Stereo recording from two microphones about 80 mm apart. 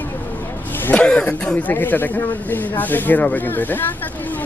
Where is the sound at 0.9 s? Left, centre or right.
Centre.